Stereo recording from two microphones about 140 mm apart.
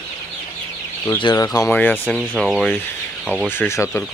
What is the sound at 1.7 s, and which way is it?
Speech, 15° left (ahead or behind).